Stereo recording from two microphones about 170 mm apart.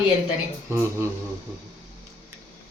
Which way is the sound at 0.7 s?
15° right (ahead or behind).